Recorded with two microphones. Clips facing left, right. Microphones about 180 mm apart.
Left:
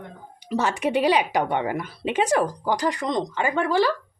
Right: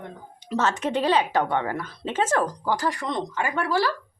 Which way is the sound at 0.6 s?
10° left (ahead or behind).